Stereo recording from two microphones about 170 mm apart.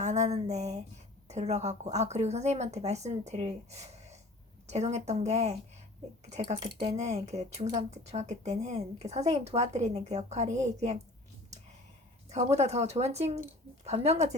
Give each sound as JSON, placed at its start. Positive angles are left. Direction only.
{"t": 0.0, "sound": "speech", "side_deg": -45}
{"t": 12.3, "sound": "speech", "side_deg": -40}